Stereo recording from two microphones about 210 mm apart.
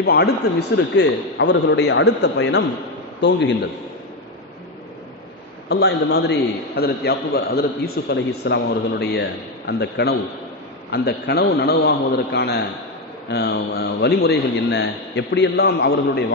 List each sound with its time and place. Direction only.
0.0 s a man's voice: 50° left (ahead or behind)
5.7 s a man's voice: 50° left (ahead or behind)